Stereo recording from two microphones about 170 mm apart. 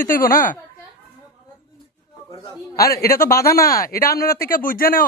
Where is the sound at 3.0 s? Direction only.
60° left (ahead or behind).